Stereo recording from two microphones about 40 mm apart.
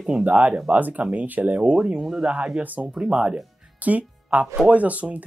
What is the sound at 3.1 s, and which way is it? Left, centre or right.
Speech, right.